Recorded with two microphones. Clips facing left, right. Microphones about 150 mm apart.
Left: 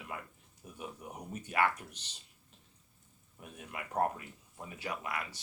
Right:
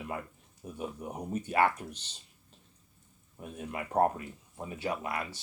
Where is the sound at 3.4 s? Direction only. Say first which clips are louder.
Right 7 dB; 30° right (ahead or behind).